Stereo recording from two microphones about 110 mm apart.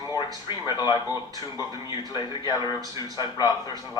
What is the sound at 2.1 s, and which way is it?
Speech, 40° left (ahead or behind).